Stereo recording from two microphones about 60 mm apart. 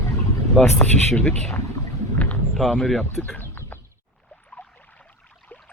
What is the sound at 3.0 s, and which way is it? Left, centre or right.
Speech, left.